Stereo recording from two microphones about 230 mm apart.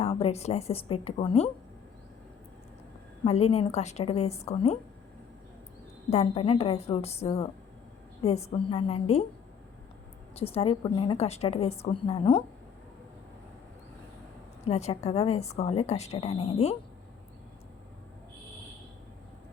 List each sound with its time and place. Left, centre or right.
0.0 s a woman's voice: left
3.2 s a woman's voice: left
6.1 s a woman's voice: left
10.3 s a woman's voice: left
14.7 s a woman's voice: left